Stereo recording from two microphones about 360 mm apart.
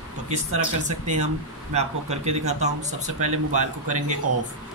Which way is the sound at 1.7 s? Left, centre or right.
Centre.